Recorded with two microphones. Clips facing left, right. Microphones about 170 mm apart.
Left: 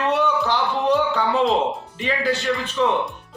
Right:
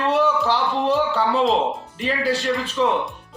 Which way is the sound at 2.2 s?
35° right (ahead or behind).